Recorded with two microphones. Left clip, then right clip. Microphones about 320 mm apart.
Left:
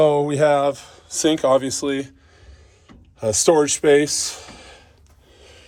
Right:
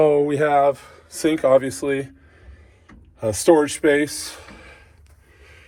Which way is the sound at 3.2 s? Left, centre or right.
Centre.